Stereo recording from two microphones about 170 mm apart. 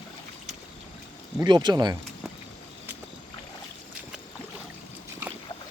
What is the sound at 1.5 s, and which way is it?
Speech, 25° right (ahead or behind).